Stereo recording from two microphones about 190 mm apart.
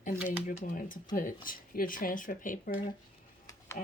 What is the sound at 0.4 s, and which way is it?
Speech, 45° left (ahead or behind).